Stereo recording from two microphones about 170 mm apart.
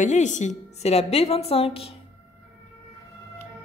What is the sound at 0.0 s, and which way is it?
A woman's voice, 45° left (ahead or behind).